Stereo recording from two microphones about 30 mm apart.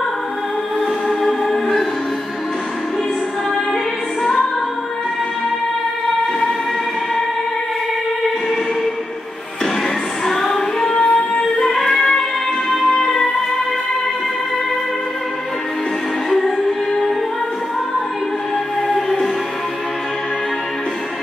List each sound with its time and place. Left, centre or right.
1.2 s music: centre
10.2 s music: centre
10.9 s music: left
11.6 s music: centre
11.9 s music: left
13.0 s music: centre
16.3 s music: centre
18.9 s music: centre